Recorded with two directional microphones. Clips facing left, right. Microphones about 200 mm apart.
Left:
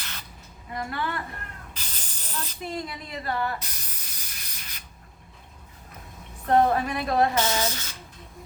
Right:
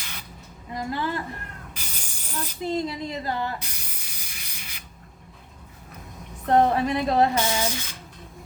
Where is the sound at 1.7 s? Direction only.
10° right (ahead or behind).